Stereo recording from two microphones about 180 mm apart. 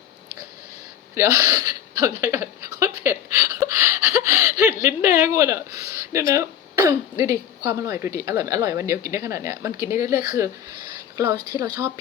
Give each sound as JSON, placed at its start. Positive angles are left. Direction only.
{"t": 1.1, "sound": "speech", "side_deg": -15}